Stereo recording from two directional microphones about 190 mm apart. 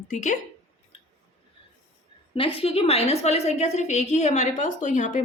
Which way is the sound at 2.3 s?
30° left (ahead or behind).